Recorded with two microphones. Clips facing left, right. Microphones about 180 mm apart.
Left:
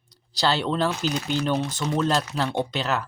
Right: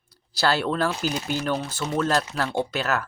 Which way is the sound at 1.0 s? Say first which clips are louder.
Left 1 dB; 10° right (ahead or behind).